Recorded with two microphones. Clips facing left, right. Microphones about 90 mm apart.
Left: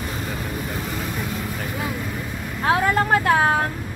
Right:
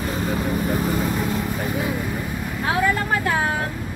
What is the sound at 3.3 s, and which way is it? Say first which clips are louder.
Vehicle: left 4 dB; 50° left (ahead or behind).